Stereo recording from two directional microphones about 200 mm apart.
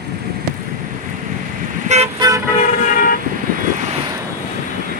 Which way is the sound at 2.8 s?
45° left (ahead or behind).